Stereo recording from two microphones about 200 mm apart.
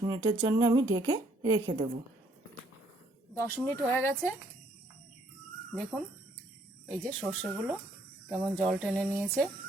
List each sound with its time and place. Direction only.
0.0 s a woman's voice: 20° right (ahead or behind)
3.3 s speech: 10° left (ahead or behind)
5.7 s speech: 5° left (ahead or behind)